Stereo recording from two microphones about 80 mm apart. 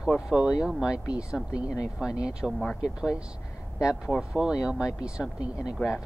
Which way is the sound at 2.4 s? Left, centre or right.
Centre.